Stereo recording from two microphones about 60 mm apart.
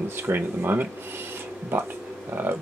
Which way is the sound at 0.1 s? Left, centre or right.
Right.